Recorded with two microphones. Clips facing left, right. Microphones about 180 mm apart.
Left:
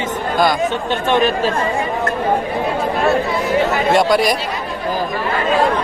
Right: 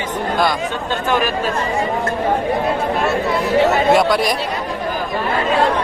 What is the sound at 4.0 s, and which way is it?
Speech, centre (ahead or behind).